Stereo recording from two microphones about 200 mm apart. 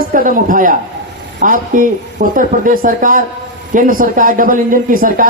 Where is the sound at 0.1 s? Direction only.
45° right (ahead or behind).